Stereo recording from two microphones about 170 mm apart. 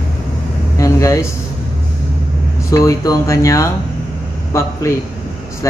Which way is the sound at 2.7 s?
20° left (ahead or behind).